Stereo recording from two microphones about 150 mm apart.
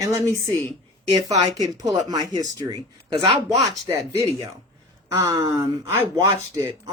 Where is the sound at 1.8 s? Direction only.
25° right (ahead or behind).